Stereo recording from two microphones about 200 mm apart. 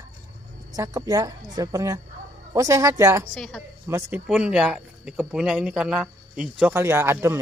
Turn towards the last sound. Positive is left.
turn(degrees=-15)  # may be behind; listen again after turning